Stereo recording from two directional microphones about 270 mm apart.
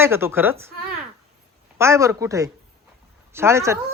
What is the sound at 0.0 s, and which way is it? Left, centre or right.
Speech, centre.